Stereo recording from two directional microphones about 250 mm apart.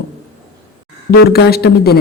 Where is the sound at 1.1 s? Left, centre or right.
Left.